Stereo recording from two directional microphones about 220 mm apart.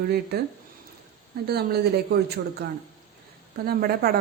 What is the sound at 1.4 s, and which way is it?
A woman's voice, 45° right (ahead or behind).